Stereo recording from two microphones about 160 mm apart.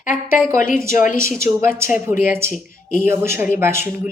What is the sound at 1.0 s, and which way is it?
Speech, 55° left (ahead or behind).